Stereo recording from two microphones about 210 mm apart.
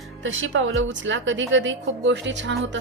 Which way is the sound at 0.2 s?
65° right (ahead or behind).